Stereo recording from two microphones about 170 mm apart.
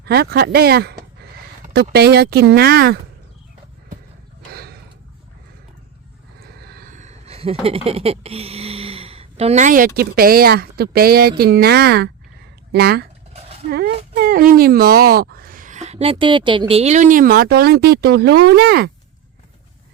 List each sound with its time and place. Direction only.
0.0 s speech: 70° right (ahead or behind)
4.5 s a sound: 65° right (ahead or behind)
6.4 s speech: 65° right (ahead or behind)